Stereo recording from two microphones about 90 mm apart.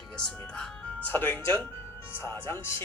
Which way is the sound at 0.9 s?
20° left (ahead or behind).